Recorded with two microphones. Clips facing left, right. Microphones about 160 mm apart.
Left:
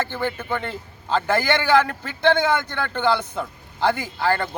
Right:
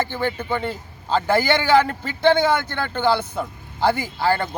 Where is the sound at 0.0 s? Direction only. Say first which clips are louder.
Right 2 dB; 10° right (ahead or behind).